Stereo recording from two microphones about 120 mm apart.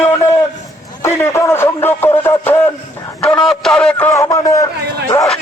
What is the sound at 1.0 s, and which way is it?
Music, 20° left (ahead or behind).